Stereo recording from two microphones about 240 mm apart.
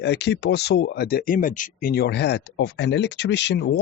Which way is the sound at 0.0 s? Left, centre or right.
Left.